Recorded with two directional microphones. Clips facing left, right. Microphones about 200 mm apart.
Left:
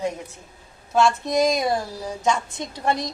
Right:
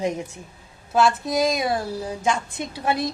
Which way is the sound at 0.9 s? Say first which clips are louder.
Left 1 dB; 5° right (ahead or behind).